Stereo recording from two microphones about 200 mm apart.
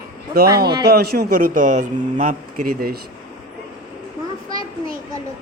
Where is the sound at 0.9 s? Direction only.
50° right (ahead or behind).